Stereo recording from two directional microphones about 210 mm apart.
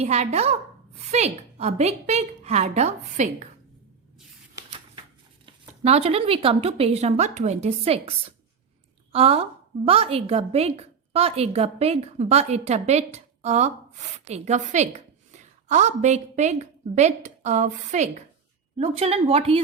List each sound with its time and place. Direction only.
0.0 s a woman's voice: 30° right (ahead or behind)
5.5 s a woman's voice: 30° right (ahead or behind)
9.1 s a woman's voice: 30° right (ahead or behind)